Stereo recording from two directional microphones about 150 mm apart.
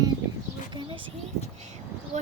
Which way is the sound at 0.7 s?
35° right (ahead or behind).